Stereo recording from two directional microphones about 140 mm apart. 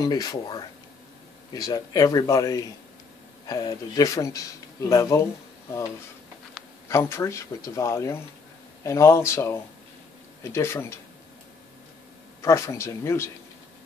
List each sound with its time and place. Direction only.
0.0 s speech: 25° left (ahead or behind)
6.9 s speech: 20° left (ahead or behind)
12.4 s speech: 20° left (ahead or behind)